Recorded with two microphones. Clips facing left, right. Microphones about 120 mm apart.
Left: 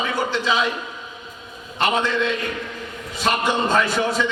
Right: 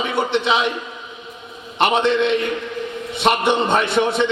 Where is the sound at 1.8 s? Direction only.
25° right (ahead or behind).